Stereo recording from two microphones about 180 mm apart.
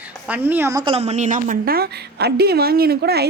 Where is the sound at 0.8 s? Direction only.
35° right (ahead or behind); by 3.2 s 60° right (ahead or behind).